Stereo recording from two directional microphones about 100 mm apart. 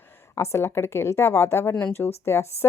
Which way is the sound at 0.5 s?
25° left (ahead or behind).